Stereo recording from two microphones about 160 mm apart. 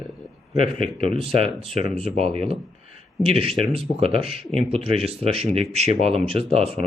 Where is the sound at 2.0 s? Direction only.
40° right (ahead or behind).